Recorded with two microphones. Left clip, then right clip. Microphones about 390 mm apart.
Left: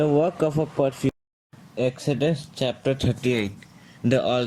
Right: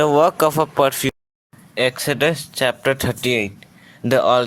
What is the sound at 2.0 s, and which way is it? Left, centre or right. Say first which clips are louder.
Speech: right 6 dB; right.